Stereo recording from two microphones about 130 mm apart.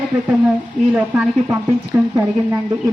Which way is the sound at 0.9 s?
10° right (ahead or behind).